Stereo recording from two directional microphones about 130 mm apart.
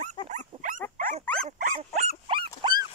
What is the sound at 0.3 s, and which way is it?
Dog, 80° right.